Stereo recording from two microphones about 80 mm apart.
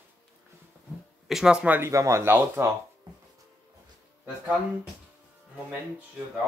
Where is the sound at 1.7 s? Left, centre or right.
Right.